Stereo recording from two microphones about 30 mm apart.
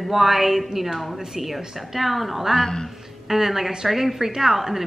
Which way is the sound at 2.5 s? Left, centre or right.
Centre.